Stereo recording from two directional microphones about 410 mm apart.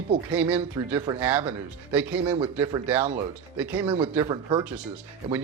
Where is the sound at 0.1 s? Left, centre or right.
Centre.